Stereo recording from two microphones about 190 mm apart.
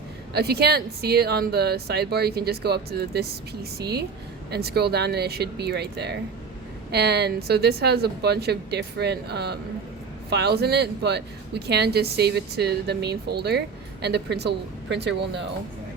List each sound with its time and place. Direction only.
0.3 s speech: 60° right (ahead or behind)